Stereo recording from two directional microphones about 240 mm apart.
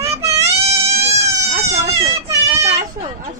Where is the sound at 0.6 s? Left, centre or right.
Right.